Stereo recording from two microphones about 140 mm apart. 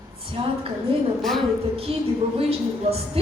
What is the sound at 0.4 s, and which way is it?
Speech, 40° right (ahead or behind).